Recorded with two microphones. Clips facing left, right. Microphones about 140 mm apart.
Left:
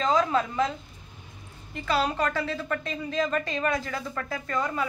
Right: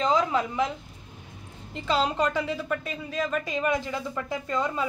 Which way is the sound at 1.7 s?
25° right (ahead or behind).